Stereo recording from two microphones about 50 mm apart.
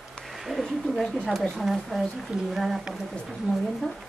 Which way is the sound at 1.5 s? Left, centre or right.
Centre.